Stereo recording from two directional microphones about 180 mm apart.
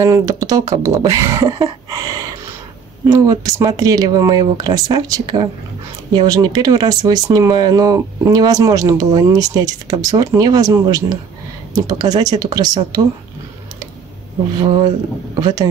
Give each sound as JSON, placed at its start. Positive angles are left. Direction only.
{"t": 0.0, "sound": "speech", "side_deg": -20}
{"t": 15.4, "sound": "speech", "side_deg": -25}